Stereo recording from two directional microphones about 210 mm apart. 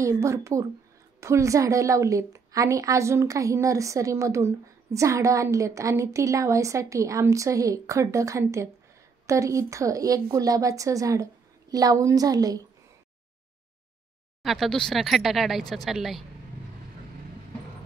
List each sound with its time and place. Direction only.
0.0 s a woman's voice: 15° right (ahead or behind)
14.4 s speech: centre (ahead or behind)